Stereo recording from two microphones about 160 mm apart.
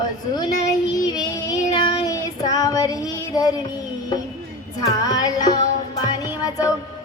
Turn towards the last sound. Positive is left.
turn(degrees=20)  # may be behind; listen again after turning